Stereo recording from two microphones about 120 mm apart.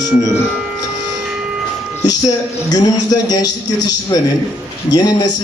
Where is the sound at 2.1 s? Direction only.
35° left (ahead or behind).